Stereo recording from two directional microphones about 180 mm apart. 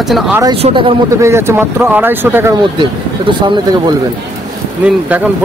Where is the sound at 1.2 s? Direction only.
15° right (ahead or behind).